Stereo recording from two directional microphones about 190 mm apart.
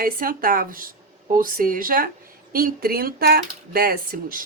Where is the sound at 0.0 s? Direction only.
50° right (ahead or behind).